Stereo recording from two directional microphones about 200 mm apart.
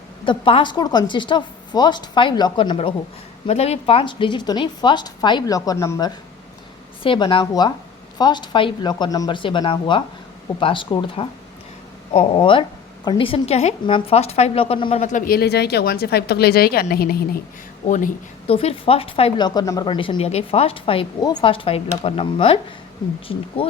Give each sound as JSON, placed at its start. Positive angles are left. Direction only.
{"t": 0.3, "sound": "a woman's voice", "side_deg": 25}
{"t": 17.8, "sound": "a woman's voice", "side_deg": 40}